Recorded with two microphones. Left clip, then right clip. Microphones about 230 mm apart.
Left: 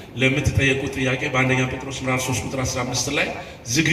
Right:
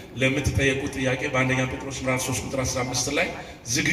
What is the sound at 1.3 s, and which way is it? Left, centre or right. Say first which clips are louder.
A man's voice: left 3 dB; left.